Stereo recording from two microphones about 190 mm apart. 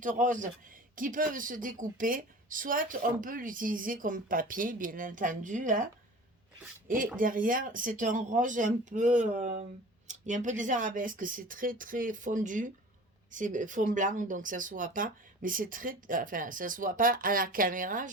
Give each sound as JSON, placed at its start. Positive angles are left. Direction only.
{"t": 0.0, "sound": "speech", "side_deg": -45}
{"t": 6.8, "sound": "speech", "side_deg": -45}